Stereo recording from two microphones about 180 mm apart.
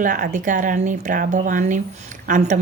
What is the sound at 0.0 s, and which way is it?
A woman's voice, 50° right (ahead or behind).